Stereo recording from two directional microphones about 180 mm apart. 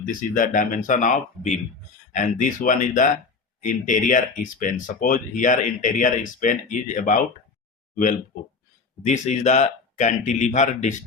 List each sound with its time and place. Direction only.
0.0 s speech: 50° left (ahead or behind)
9.0 s speech: 40° left (ahead or behind)